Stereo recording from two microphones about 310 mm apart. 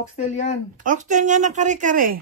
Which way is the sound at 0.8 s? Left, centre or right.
Right.